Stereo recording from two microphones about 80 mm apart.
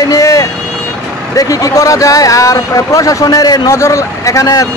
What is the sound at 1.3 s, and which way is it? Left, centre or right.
A man's voice, left.